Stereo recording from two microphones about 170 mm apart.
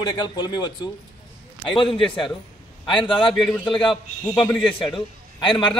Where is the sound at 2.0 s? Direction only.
30° left (ahead or behind).